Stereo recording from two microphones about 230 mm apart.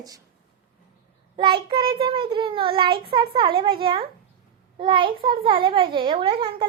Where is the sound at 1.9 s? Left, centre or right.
Right.